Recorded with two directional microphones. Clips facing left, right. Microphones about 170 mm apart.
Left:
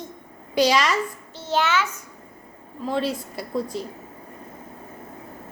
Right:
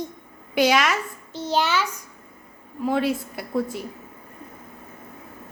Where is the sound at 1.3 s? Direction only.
15° right (ahead or behind).